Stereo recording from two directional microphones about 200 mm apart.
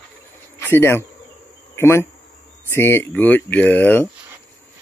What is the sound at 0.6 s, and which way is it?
Speech, 10° left (ahead or behind).